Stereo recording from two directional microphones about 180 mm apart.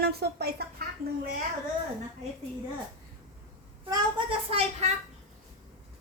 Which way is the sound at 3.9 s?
25° right (ahead or behind).